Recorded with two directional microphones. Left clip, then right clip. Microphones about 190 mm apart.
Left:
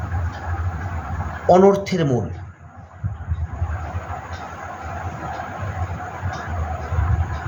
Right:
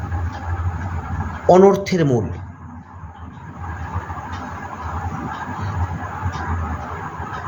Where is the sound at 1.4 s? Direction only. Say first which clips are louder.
Right 2 dB; 25° right (ahead or behind).